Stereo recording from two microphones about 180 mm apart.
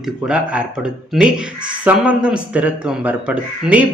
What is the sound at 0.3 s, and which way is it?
Speech, 5° right (ahead or behind).